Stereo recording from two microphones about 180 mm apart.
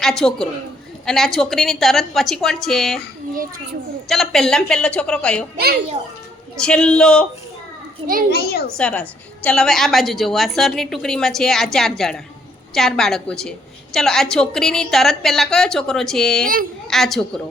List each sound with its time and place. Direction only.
0.0 s a woman's voice: 5° left (ahead or behind)
4.1 s a woman's voice: centre (ahead or behind)
6.6 s a woman's voice: 5° left (ahead or behind)
8.3 s a child's voice: 60° left (ahead or behind)
8.8 s a woman's voice: 10° left (ahead or behind)